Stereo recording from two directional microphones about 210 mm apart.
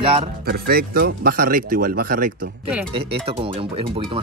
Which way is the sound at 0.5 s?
45° right (ahead or behind).